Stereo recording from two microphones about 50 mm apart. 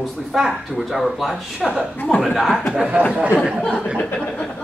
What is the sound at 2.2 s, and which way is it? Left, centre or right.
A man's voice, centre.